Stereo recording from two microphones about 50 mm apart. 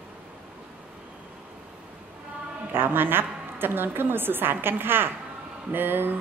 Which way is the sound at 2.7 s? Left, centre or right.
Right.